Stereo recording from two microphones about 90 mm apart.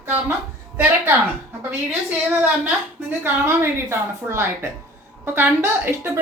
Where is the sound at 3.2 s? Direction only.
25° right (ahead or behind).